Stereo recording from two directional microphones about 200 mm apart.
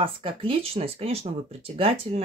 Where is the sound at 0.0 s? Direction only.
25° right (ahead or behind).